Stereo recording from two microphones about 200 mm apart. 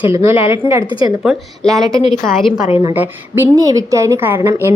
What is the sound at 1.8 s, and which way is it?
A woman's voice, 20° right (ahead or behind).